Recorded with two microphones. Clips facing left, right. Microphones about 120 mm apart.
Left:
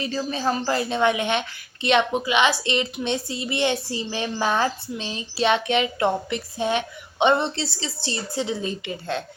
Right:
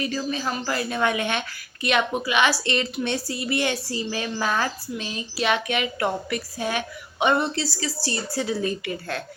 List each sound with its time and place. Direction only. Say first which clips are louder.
0.0 s a woman's voice: left 2 dB; 30° left (ahead or behind)